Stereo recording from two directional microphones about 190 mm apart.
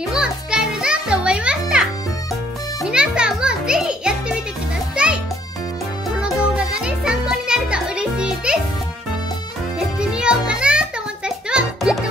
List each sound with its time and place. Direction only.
0.1 s music: 5° right (ahead or behind)
2.9 s music: 5° right (ahead or behind)
9.8 s music: 5° right (ahead or behind)